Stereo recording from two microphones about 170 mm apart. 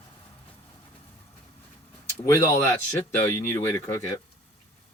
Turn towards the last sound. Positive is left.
turn(degrees=15)  # may be behind; listen again after turning